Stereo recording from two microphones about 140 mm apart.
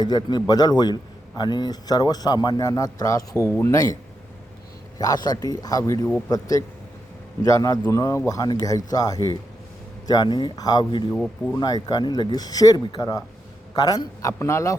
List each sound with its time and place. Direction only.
0.0 s speech: 30° left (ahead or behind)
4.9 s speech: 30° left (ahead or behind)